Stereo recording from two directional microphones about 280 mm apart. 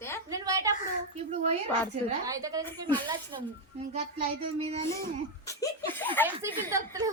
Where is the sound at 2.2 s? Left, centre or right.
Centre.